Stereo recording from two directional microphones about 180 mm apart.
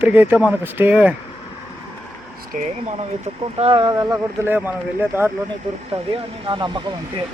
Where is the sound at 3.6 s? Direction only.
30° right (ahead or behind); by 5.3 s 10° right (ahead or behind).